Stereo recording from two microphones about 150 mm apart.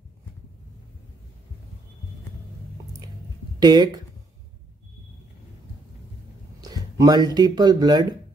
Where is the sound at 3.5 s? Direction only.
30° right (ahead or behind).